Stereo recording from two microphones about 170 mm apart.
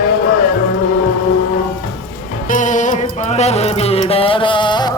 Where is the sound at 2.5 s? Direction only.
45° left (ahead or behind).